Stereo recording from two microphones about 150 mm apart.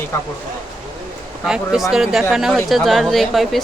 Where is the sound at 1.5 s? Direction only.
5° right (ahead or behind).